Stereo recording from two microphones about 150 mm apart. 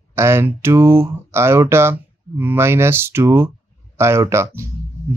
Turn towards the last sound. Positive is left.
turn(degrees=-20)  # may be behind; listen again after turning